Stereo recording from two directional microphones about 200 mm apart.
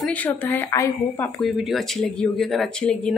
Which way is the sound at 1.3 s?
Centre (ahead or behind).